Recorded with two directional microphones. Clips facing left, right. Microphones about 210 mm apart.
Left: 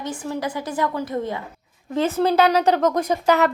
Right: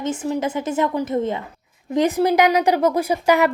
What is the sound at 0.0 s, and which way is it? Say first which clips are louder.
A woman's voice: right 4 dB; 20° right (ahead or behind).